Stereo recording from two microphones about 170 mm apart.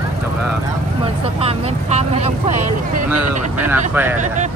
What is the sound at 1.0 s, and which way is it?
Vehicle, 35° right (ahead or behind).